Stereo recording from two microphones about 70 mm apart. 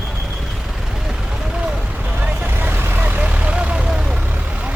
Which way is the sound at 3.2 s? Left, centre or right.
Centre.